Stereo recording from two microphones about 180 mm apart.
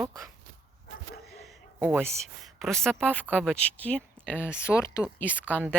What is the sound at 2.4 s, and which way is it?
Speech, centre (ahead or behind).